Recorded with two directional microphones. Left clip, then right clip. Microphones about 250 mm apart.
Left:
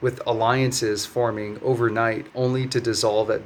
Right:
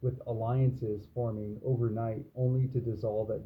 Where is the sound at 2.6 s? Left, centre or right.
Left.